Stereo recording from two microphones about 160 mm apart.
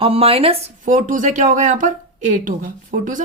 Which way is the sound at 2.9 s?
75° right (ahead or behind).